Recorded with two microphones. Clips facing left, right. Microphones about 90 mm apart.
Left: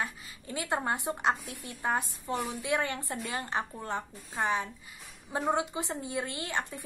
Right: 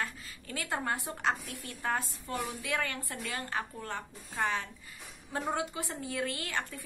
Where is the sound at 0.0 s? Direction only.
20° left (ahead or behind).